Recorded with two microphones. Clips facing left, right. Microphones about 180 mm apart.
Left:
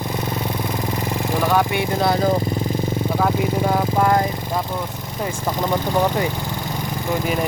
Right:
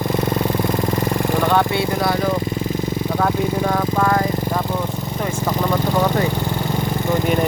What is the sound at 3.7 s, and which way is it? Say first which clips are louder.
Vehicle: left 2 dB; 20° left (ahead or behind).